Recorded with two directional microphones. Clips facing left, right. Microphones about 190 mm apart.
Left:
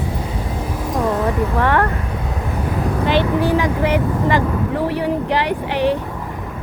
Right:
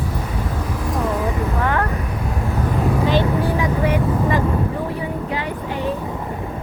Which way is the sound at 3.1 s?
80° left.